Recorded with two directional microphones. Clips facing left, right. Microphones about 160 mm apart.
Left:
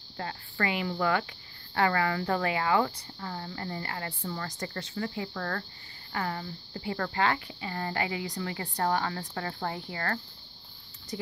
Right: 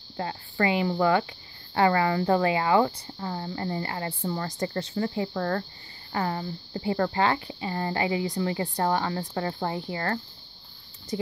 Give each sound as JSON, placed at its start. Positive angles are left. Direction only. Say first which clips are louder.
{"t": 0.2, "sound": "speech", "louder": "right 6 dB", "side_deg": -25}